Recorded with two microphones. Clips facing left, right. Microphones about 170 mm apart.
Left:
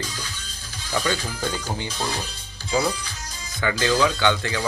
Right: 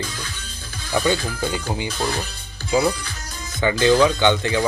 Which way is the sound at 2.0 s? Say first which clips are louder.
Right 4 dB; 55° right (ahead or behind).